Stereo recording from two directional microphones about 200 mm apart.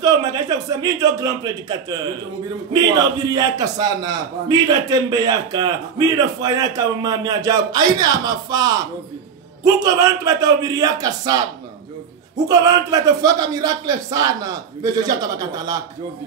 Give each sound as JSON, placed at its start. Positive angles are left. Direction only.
{"t": 0.0, "sound": "a man's voice", "side_deg": -15}
{"t": 3.3, "sound": "a man's voice", "side_deg": -20}
{"t": 12.4, "sound": "a man's voice", "side_deg": -20}